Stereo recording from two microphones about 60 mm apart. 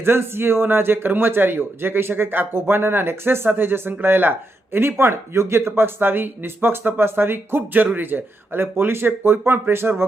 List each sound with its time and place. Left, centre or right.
0.0 s a man's voice: right